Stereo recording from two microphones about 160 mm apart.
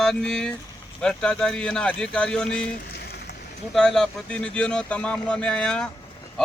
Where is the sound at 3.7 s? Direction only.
Centre (ahead or behind).